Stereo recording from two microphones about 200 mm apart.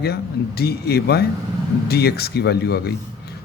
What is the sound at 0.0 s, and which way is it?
A man's voice, 55° left (ahead or behind).